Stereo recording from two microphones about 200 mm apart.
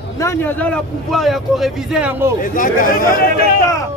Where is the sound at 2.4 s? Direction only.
40° left (ahead or behind).